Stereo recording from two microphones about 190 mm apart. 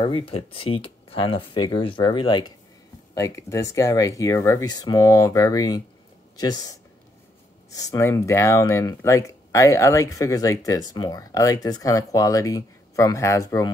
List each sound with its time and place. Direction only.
0.0 s speech: 30° left (ahead or behind)